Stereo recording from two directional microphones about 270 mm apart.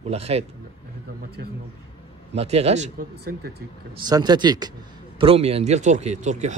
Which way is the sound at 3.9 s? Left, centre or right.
Centre.